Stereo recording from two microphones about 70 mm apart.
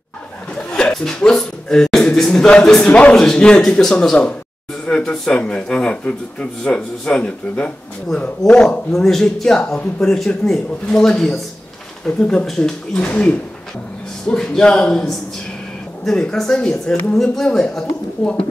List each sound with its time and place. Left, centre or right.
0.6 s a man's voice: centre
8.9 s speech: centre